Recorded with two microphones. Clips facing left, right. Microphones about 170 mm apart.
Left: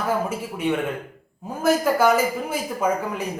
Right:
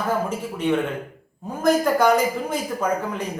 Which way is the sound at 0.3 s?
10° left (ahead or behind).